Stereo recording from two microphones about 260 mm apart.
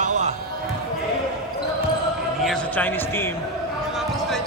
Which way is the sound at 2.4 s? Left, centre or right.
Centre.